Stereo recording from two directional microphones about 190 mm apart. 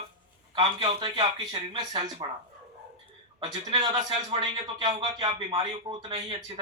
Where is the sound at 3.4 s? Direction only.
25° right (ahead or behind).